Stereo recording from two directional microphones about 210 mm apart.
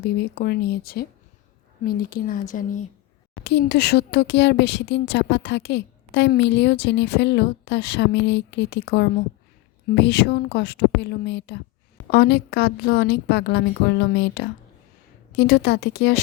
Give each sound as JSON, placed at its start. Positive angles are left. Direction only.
{"t": 0.0, "sound": "a woman's voice", "side_deg": 50}
{"t": 3.4, "sound": "a woman's voice", "side_deg": 50}